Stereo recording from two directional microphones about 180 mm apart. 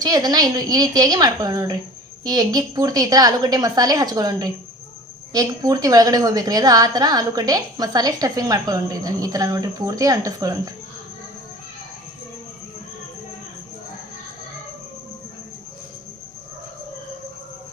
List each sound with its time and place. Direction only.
0.0 s a woman's voice: 20° right (ahead or behind)